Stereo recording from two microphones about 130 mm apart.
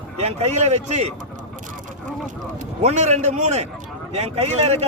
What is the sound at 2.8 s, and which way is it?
A man's voice, 65° right (ahead or behind).